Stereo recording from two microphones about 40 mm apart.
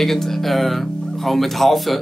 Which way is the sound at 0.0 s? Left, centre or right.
Centre.